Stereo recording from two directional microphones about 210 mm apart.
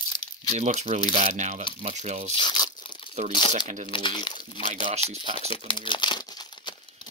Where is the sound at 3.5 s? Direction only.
35° right (ahead or behind).